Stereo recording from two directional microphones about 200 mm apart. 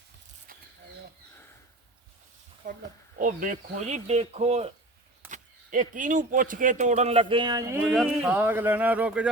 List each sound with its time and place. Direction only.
3.2 s speech: 40° right (ahead or behind)
5.3 s speech: 40° right (ahead or behind); by 7.8 s 20° right (ahead or behind)
7.8 s speech: 5° right (ahead or behind)